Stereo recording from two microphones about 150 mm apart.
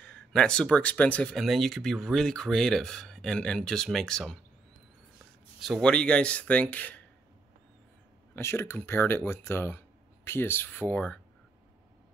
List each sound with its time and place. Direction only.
0.3 s speech: 5° left (ahead or behind)
5.6 s speech: centre (ahead or behind)
8.4 s speech: 15° left (ahead or behind)